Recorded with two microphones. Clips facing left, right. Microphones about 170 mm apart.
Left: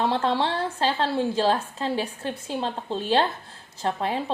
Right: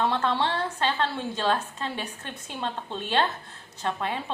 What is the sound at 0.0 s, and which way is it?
A woman's voice, 30° left (ahead or behind).